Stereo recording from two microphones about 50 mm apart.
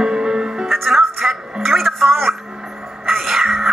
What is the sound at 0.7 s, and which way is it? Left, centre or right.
Music, centre.